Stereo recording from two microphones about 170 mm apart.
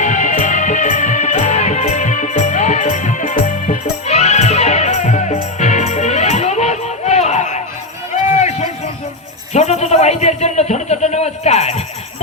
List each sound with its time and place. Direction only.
0.0 s music: 45° left (ahead or behind)
8.1 s run: 45° left (ahead or behind)
9.5 s a sound: 40° left (ahead or behind)